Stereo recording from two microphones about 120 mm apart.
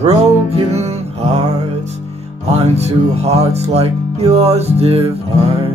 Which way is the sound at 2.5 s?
65° right (ahead or behind).